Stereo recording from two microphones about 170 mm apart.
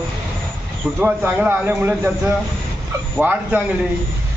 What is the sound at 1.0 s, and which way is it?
A man's voice, 10° right (ahead or behind).